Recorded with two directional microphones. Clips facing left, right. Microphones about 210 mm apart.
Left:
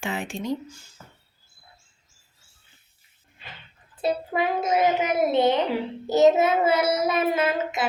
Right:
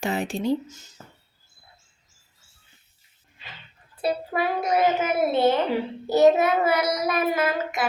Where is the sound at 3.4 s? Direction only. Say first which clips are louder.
Left 1 dB; 55° left (ahead or behind).